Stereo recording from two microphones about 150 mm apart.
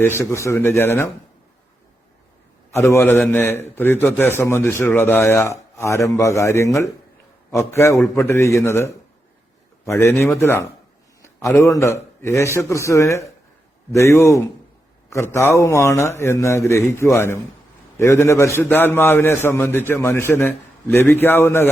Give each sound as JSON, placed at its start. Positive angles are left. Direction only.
{"t": 0.0, "sound": "a man's voice", "side_deg": 15}
{"t": 2.7, "sound": "a man's voice", "side_deg": 15}